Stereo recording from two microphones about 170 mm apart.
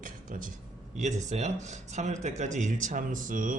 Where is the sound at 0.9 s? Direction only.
45° right (ahead or behind).